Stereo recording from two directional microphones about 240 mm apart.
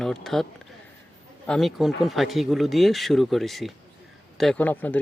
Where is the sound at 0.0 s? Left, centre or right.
Centre.